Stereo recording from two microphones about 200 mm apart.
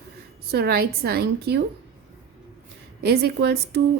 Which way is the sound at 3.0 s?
55° right (ahead or behind).